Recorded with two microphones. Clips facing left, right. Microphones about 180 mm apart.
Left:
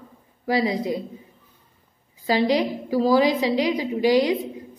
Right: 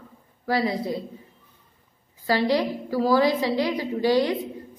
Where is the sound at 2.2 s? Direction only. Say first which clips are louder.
Left 2 dB; 15° left (ahead or behind).